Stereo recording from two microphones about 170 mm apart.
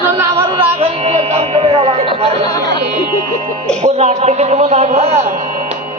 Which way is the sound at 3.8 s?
40° right (ahead or behind).